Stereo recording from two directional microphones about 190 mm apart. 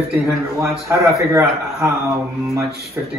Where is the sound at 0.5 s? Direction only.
15° right (ahead or behind).